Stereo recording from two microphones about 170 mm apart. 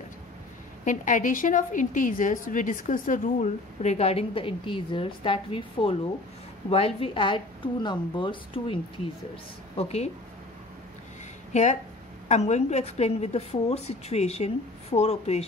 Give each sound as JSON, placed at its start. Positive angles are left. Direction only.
{"t": 0.8, "sound": "a woman's voice", "side_deg": 50}
{"t": 9.8, "sound": "a woman's voice", "side_deg": 35}
{"t": 11.5, "sound": "a woman's voice", "side_deg": 45}